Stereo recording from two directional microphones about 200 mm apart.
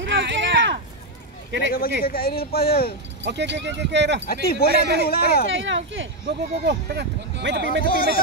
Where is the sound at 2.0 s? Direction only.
50° left (ahead or behind).